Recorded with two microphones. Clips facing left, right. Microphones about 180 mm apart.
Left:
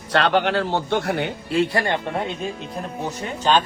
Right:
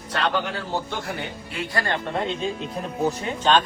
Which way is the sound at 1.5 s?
25° left (ahead or behind).